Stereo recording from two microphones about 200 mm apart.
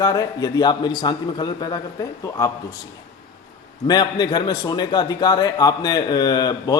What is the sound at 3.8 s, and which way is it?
A man's voice, 20° left (ahead or behind).